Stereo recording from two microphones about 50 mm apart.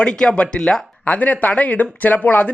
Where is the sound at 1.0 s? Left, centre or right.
Left.